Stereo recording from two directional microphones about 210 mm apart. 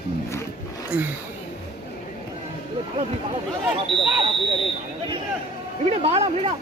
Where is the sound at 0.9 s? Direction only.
5° right (ahead or behind).